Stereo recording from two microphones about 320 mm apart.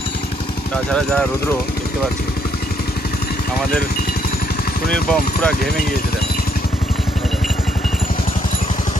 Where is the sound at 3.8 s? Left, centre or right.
Left.